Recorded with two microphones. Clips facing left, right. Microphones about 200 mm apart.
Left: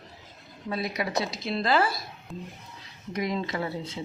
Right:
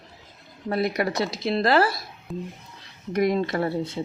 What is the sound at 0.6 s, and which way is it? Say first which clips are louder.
Speech: right 6 dB; 60° right (ahead or behind).